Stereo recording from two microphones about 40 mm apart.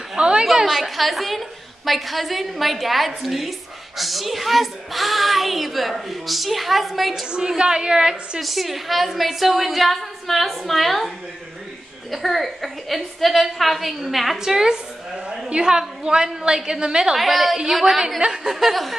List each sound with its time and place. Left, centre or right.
0.2 s a woman's voice: right
0.6 s speech: centre
7.2 s a woman's voice: right
8.4 s speech: centre
12.1 s speech: centre
14.4 s a woman's voice: centre
17.2 s speech: centre
18.2 s a woman's voice: centre
18.5 s speech: centre